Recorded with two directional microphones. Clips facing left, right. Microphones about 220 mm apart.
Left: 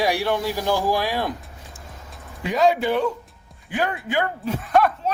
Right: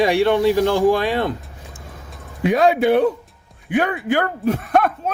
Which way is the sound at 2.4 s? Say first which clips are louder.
Right 4 dB; 55° right (ahead or behind).